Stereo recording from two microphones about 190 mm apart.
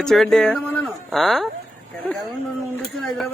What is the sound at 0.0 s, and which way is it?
Speech, centre (ahead or behind).